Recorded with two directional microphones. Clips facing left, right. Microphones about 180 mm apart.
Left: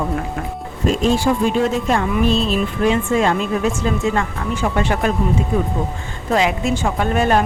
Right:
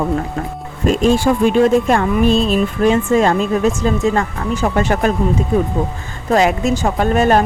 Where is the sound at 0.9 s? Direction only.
55° right (ahead or behind).